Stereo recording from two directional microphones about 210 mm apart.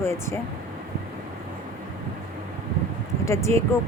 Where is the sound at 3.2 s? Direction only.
15° left (ahead or behind).